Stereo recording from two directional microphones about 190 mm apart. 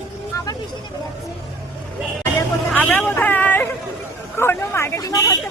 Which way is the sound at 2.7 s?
10° left (ahead or behind).